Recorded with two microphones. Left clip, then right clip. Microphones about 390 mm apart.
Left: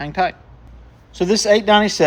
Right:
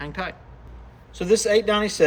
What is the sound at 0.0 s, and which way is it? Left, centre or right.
A man's voice, centre.